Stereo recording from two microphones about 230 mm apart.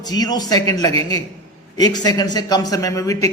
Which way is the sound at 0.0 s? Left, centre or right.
Centre.